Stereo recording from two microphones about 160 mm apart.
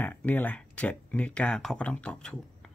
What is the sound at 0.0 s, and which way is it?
Speech, 10° left (ahead or behind).